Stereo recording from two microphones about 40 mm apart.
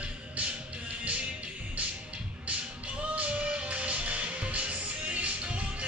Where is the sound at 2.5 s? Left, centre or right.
Right.